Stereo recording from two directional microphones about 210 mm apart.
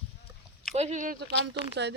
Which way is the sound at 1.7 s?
55° right (ahead or behind).